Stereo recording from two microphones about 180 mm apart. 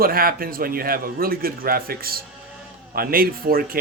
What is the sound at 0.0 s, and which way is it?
A man's voice, 55° right (ahead or behind).